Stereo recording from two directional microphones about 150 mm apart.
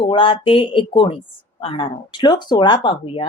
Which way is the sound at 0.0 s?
35° left (ahead or behind).